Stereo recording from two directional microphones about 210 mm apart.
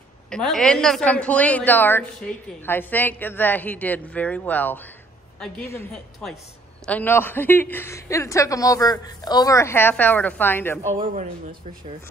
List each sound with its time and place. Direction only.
0.3 s a woman's voice: 5° left (ahead or behind)
11.0 s speech: 40° right (ahead or behind)